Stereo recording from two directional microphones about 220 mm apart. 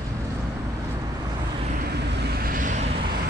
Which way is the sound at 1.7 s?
45° right (ahead or behind).